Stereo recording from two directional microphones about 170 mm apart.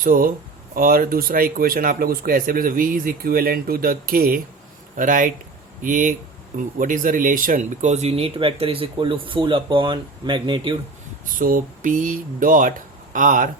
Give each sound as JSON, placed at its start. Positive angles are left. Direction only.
{"t": 0.0, "sound": "speech", "side_deg": -50}
{"t": 11.3, "sound": "speech", "side_deg": -55}